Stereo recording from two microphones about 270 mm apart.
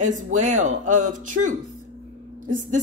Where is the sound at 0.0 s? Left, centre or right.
Right.